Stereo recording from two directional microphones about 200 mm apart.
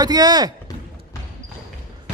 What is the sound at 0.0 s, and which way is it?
Speech, 20° right (ahead or behind).